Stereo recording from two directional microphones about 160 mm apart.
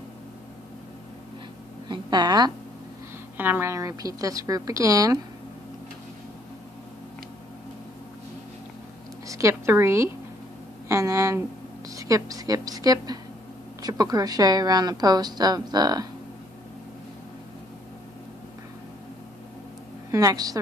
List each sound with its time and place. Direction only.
1.9 s a woman's voice: 25° right (ahead or behind)
3.3 s a woman's voice: 10° right (ahead or behind)
9.3 s a woman's voice: 20° right (ahead or behind)
20.1 s a woman's voice: 20° right (ahead or behind)